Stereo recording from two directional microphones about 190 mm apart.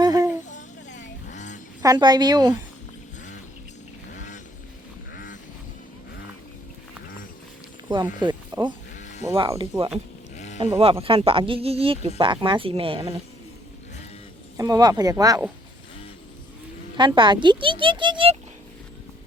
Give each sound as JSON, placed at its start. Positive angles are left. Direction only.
{"t": 0.0, "sound": "humming", "side_deg": -20}
{"t": 0.4, "sound": "vehicle", "side_deg": 40}
{"t": 1.8, "sound": "speech", "side_deg": -20}
{"t": 4.1, "sound": "vehicle", "side_deg": 40}
{"t": 5.1, "sound": "duck", "side_deg": 45}
{"t": 8.2, "sound": "speech", "side_deg": -20}
{"t": 9.0, "sound": "sheep", "side_deg": 40}
{"t": 9.2, "sound": "speech", "side_deg": -15}
{"t": 10.3, "sound": "sheep", "side_deg": 40}
{"t": 10.8, "sound": "speech", "side_deg": -30}
{"t": 14.5, "sound": "speech", "side_deg": -20}
{"t": 17.0, "sound": "speech", "side_deg": -25}